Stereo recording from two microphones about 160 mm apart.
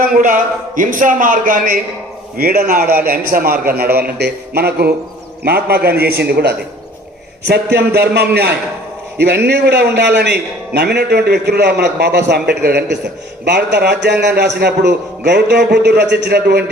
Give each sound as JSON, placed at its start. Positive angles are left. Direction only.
{"t": 0.0, "sound": "speech", "side_deg": -60}
{"t": 2.4, "sound": "a man's voice", "side_deg": -70}